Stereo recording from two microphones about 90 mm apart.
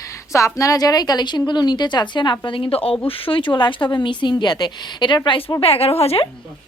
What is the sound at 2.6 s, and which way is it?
Speech, 90° left.